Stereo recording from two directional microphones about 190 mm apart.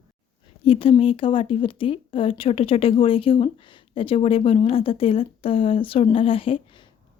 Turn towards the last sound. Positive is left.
turn(degrees=30)  # may be behind; listen again after turning